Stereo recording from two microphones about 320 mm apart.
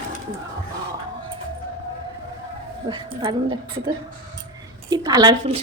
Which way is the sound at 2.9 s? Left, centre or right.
Centre.